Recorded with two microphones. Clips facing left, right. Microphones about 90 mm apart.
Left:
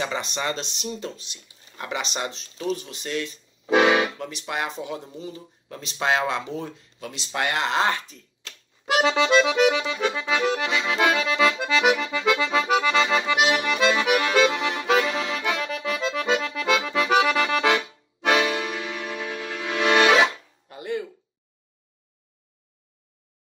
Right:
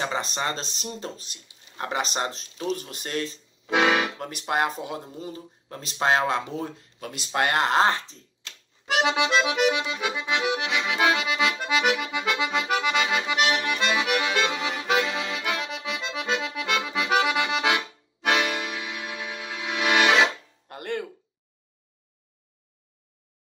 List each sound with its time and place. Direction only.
0.0 s speech: 35° right (ahead or behind)
3.7 s speech: 5° left (ahead or behind)
4.2 s speech: 45° right (ahead or behind)
9.0 s accordion: 15° right (ahead or behind)
12.4 s accordion: centre (ahead or behind)
13.4 s accordion: 10° left (ahead or behind)
16.3 s accordion: 15° right (ahead or behind)
16.6 s accordion: 5° right (ahead or behind)
20.6 s music: 60° right (ahead or behind)